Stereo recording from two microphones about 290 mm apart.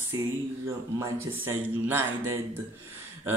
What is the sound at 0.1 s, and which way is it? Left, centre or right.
A man's voice, centre.